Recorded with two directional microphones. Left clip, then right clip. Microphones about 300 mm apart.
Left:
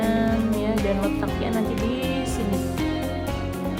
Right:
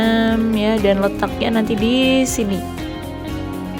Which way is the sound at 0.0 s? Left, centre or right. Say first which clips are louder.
Right 6 dB; right.